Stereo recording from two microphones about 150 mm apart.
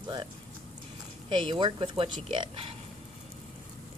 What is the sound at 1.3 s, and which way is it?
Speech, 30° right (ahead or behind).